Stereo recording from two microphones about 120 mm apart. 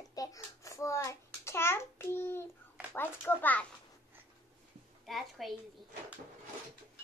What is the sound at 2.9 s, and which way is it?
Speech, 15° left (ahead or behind).